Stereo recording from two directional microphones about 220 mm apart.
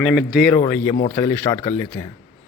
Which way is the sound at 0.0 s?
Centre (ahead or behind).